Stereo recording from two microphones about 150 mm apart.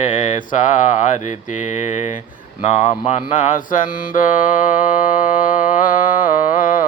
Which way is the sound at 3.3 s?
55° left (ahead or behind).